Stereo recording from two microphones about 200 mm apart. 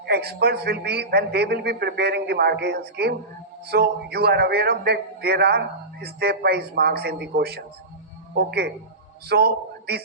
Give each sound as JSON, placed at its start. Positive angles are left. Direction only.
{"t": 0.0, "sound": "a man's voice", "side_deg": -55}